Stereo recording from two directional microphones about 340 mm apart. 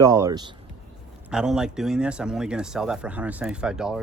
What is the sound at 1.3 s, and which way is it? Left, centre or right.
Speech, centre.